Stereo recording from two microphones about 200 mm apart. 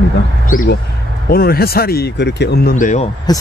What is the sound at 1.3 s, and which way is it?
Speech, 50° left (ahead or behind).